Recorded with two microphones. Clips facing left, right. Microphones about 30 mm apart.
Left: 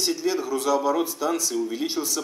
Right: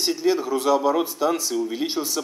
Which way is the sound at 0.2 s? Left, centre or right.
Centre.